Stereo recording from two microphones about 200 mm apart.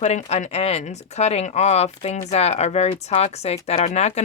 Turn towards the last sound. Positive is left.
turn(degrees=35)  # may be behind; listen again after turning